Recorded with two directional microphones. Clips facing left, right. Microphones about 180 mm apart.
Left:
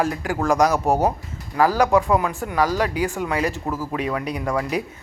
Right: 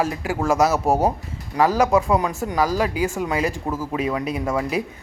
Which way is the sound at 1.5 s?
25° right (ahead or behind).